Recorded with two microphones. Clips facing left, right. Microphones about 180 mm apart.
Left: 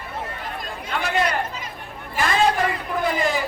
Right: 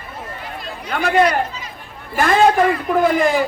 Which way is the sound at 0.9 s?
55° right (ahead or behind).